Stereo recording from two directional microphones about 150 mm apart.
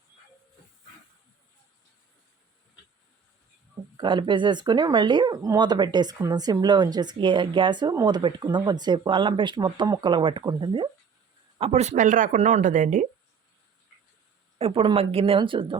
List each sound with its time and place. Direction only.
3.9 s speech: 30° right (ahead or behind)
11.5 s speech: 40° right (ahead or behind)
14.6 s speech: 40° right (ahead or behind)